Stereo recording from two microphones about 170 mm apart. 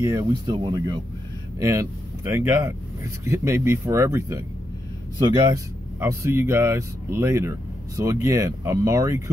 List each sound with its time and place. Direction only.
0.0 s speech: 20° right (ahead or behind)
5.5 s speech: 15° right (ahead or behind)